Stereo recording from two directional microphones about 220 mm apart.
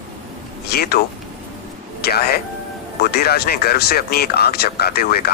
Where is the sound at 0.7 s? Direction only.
45° left (ahead or behind).